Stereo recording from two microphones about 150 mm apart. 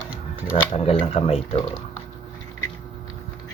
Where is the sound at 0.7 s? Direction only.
40° left (ahead or behind).